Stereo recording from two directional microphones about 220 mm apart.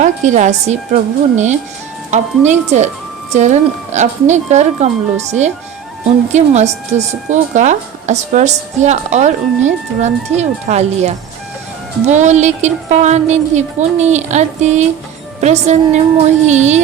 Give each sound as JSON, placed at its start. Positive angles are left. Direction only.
{"t": 0.0, "sound": "speech", "side_deg": -35}